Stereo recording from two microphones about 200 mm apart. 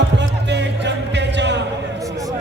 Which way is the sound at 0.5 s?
60° right (ahead or behind).